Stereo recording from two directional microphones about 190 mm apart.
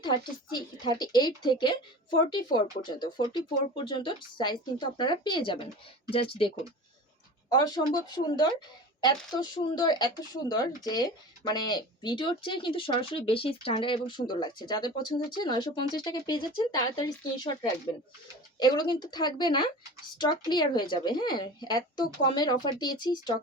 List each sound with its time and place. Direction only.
0.0 s speech: 20° left (ahead or behind)
7.5 s speech: 20° left (ahead or behind)
18.6 s speech: 20° left (ahead or behind)